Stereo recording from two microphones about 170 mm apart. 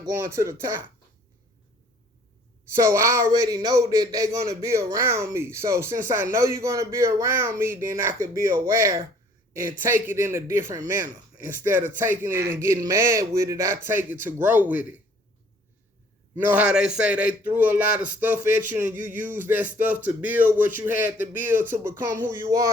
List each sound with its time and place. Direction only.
0.1 s a man's voice: 15° right (ahead or behind)
2.7 s a man's voice: 15° right (ahead or behind)
12.3 s a man's voice: 60° right (ahead or behind)
12.5 s a man's voice: 15° right (ahead or behind)
16.3 s a man's voice: 10° right (ahead or behind)